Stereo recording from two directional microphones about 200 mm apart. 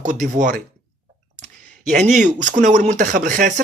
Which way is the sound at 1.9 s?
40° right (ahead or behind).